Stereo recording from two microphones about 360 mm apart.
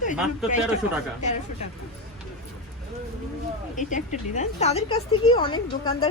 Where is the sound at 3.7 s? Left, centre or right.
Centre.